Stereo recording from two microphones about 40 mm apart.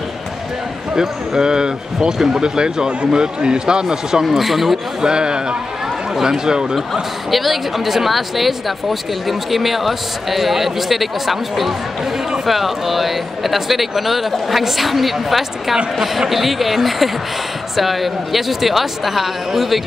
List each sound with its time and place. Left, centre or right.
0.9 s speech: centre
5.0 s speech: centre
6.9 s a woman's voice: centre